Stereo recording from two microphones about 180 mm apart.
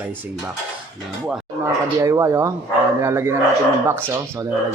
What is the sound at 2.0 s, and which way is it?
Speech, 15° right (ahead or behind).